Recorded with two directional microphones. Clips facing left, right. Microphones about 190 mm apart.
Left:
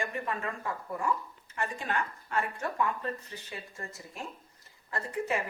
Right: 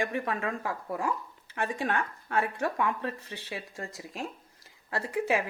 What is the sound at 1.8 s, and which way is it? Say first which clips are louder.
Speech: right 3 dB; 65° right (ahead or behind).